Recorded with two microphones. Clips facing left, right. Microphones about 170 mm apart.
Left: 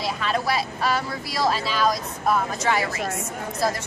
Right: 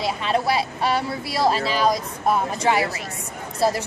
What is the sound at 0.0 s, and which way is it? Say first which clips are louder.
Speech: right 3 dB; 25° right (ahead or behind).